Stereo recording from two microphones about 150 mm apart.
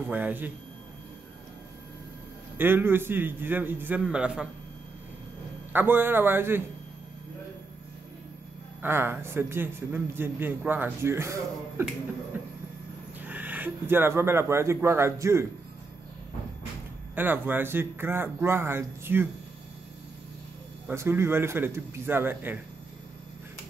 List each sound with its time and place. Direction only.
0.0 s a man's voice: 10° right (ahead or behind)
2.5 s a man's voice: 15° right (ahead or behind)
5.7 s a man's voice: 15° right (ahead or behind)
8.8 s a man's voice: 15° right (ahead or behind)
13.2 s speech: 10° right (ahead or behind)
17.1 s a man's voice: 15° right (ahead or behind)
20.8 s a man's voice: 15° right (ahead or behind)